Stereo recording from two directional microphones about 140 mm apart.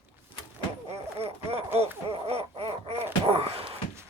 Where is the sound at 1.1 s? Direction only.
45° right (ahead or behind).